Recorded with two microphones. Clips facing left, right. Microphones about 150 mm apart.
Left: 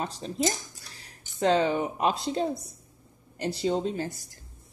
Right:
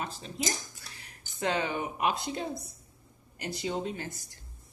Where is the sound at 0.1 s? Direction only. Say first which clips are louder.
Left 6 dB; 40° left (ahead or behind).